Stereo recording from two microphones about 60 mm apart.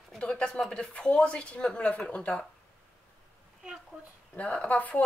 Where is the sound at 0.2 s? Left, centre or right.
Centre.